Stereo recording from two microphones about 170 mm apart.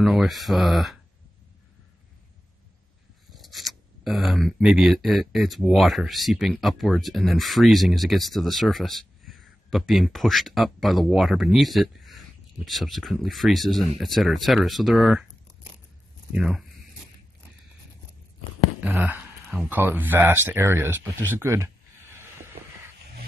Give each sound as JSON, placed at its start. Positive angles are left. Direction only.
{"t": 0.0, "sound": "speech", "side_deg": 0}
{"t": 3.3, "sound": "speech", "side_deg": 0}
{"t": 16.3, "sound": "speech", "side_deg": -5}
{"t": 18.8, "sound": "speech", "side_deg": -10}